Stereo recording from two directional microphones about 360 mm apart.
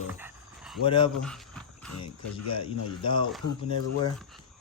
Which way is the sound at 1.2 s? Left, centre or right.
Centre.